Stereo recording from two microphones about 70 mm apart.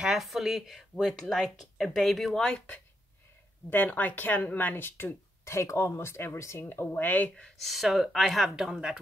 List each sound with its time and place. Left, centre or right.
0.0 s speech: centre
3.7 s speech: left
7.6 s speech: centre